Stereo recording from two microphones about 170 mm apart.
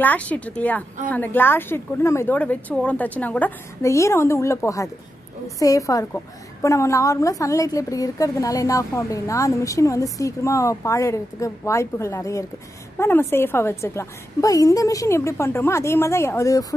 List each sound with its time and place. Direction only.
0.0 s a woman's voice: 10° left (ahead or behind)